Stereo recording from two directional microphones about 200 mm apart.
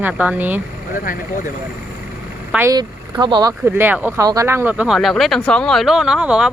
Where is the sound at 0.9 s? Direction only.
45° left (ahead or behind).